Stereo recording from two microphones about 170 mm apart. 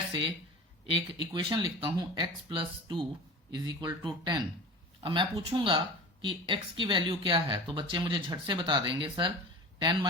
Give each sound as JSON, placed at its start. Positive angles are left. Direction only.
{"t": 0.1, "sound": "speech", "side_deg": -25}